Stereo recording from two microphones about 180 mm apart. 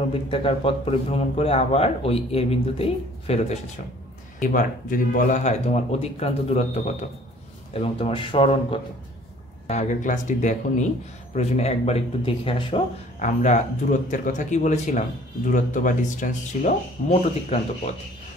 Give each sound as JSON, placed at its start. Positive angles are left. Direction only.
{"t": 0.1, "sound": "a man's voice", "side_deg": 30}
{"t": 4.4, "sound": "a man's voice", "side_deg": 50}
{"t": 9.7, "sound": "a man's voice", "side_deg": 40}
{"t": 13.2, "sound": "speech", "side_deg": 40}